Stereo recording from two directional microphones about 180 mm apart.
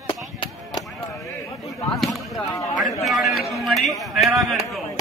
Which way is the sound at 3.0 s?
Centre (ahead or behind).